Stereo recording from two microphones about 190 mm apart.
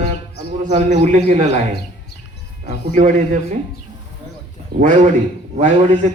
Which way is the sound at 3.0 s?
40° right (ahead or behind).